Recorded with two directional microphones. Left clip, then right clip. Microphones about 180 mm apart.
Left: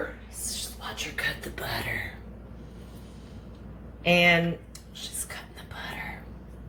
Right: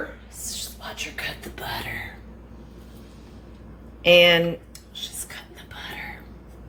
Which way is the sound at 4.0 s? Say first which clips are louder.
Right 6 dB; 50° right (ahead or behind).